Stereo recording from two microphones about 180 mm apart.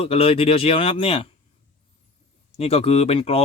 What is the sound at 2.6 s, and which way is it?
Speech, 35° left (ahead or behind).